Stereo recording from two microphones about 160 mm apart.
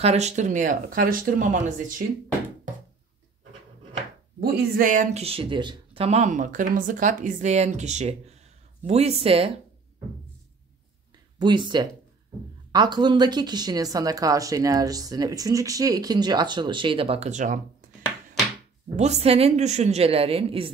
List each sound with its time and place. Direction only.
0.0 s speech: 45° right (ahead or behind)
4.4 s speech: 70° right (ahead or behind); by 5.2 s 55° right (ahead or behind)
5.2 s a woman's voice: 35° right (ahead or behind)
11.3 s speech: 30° right (ahead or behind); by 17.6 s 50° right (ahead or behind)
18.9 s a woman's voice: 45° right (ahead or behind)